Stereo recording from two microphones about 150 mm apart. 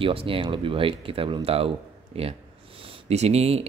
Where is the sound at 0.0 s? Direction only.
35° right (ahead or behind).